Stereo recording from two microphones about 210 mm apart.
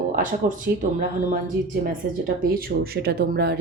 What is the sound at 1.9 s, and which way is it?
A woman's voice, 45° right (ahead or behind).